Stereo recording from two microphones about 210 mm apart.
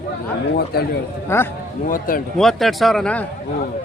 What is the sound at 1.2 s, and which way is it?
Speech, 10° left (ahead or behind).